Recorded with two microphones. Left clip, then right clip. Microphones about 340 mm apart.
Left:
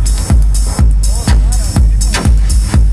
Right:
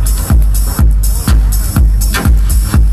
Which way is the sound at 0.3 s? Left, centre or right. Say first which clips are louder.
Right 1 dB; centre.